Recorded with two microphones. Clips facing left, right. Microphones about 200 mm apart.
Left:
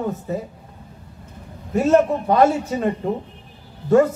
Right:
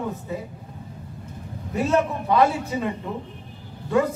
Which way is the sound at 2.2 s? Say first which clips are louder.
Left 4 dB; 45° left (ahead or behind).